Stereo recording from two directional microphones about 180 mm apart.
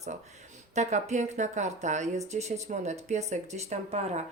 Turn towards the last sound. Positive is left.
turn(degrees=-40)  # may be behind; listen again after turning